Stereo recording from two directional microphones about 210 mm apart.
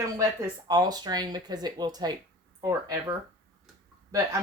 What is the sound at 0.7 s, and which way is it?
Speech, 20° right (ahead or behind).